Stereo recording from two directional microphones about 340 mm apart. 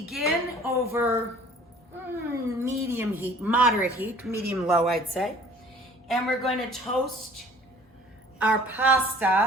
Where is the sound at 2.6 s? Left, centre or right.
Centre.